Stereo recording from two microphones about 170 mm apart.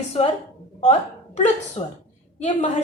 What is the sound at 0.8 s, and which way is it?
A woman's voice, 40° left (ahead or behind).